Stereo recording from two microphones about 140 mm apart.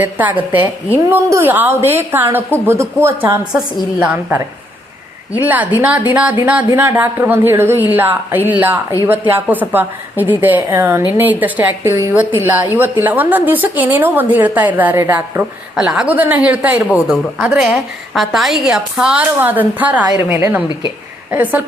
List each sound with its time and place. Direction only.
0.0 s a woman's voice: 10° right (ahead or behind)
15.7 s a woman's voice: 5° right (ahead or behind)